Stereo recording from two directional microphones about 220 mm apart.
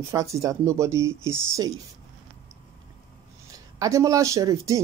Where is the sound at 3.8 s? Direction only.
15° right (ahead or behind).